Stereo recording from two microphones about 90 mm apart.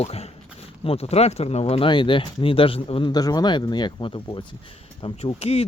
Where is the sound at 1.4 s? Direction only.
75° left (ahead or behind).